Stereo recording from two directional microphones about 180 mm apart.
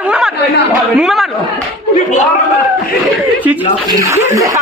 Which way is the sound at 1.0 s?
Centre (ahead or behind).